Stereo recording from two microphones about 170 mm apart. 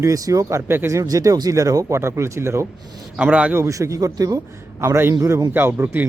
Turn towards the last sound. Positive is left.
turn(degrees=-15)  # may be behind; listen again after turning